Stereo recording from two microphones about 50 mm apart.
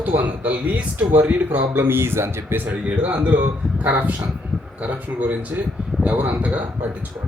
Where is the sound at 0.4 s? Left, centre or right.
Right.